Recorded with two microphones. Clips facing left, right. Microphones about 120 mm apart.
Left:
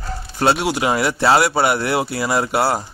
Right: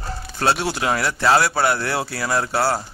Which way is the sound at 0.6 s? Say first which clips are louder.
Left 3 dB; 15° left (ahead or behind).